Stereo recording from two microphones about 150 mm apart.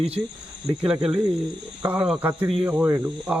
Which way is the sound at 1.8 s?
10° right (ahead or behind).